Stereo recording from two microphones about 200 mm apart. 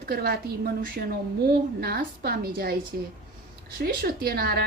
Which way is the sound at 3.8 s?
50° right (ahead or behind).